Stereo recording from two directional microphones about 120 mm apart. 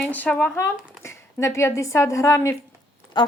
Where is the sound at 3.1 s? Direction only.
40° left (ahead or behind).